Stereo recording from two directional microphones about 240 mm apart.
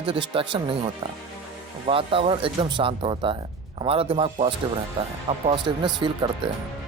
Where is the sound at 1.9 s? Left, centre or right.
Right.